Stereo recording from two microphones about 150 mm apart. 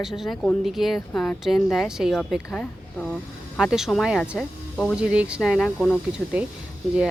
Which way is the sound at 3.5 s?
5° right (ahead or behind).